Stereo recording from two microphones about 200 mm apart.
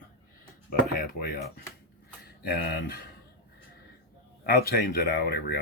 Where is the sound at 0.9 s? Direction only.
50° left (ahead or behind).